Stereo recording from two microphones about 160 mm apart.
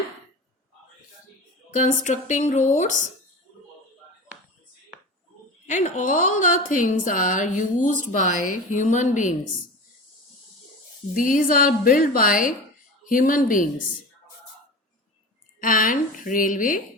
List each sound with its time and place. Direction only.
1.7 s a woman's voice: 50° left (ahead or behind)
5.6 s a woman's voice: 45° left (ahead or behind)
11.1 s a woman's voice: 60° left (ahead or behind)
15.6 s a woman's voice: 60° left (ahead or behind)